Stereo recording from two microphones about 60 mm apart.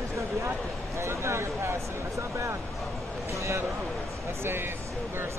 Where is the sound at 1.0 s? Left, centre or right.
Right.